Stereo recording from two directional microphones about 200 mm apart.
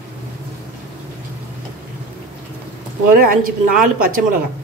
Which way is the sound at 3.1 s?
45° right (ahead or behind).